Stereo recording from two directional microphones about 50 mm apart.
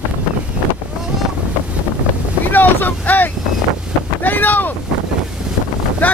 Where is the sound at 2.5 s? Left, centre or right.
Left.